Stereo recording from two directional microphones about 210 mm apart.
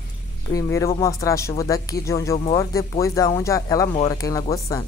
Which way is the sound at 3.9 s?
25° left (ahead or behind).